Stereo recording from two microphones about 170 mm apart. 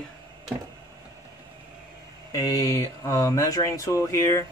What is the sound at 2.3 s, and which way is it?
Speech, 20° left (ahead or behind).